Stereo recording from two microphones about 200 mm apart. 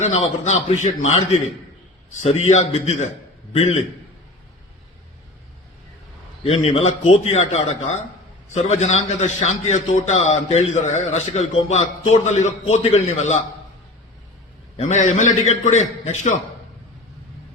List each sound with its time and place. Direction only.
0.0 s a man's voice: 35° left (ahead or behind)
6.4 s a man's voice: 30° left (ahead or behind)
14.8 s a man's voice: 35° left (ahead or behind)